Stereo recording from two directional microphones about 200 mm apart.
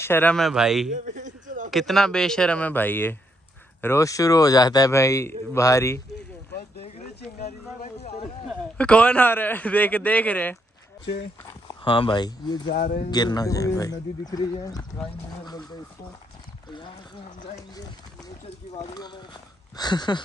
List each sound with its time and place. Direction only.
0.0 s speech: 10° left (ahead or behind)
0.9 s a sound: 40° right (ahead or behind)
1.7 s a man's voice: centre (ahead or behind)
7.3 s a sound: 40° left (ahead or behind)
8.7 s a man's voice: 5° left (ahead or behind)
11.6 s speech: 25° left (ahead or behind)
12.6 s speech: 50° left (ahead or behind)
13.1 s a man's voice: 20° left (ahead or behind)
17.4 s speech: 20° left (ahead or behind)
18.9 s a sound: 20° left (ahead or behind)
19.8 s speech: 20° left (ahead or behind)